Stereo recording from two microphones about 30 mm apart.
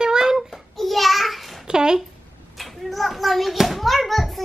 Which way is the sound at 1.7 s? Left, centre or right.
Right.